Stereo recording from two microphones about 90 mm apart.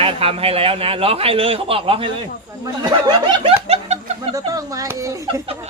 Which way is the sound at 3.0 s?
55° right (ahead or behind).